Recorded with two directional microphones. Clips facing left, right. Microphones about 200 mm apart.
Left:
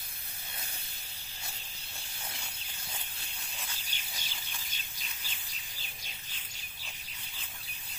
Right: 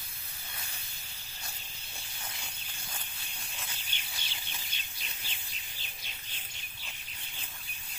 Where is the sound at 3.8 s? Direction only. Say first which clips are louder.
Even; 40° left (ahead or behind).